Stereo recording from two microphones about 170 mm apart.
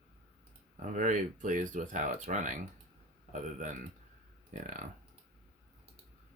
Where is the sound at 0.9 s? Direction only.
50° right (ahead or behind).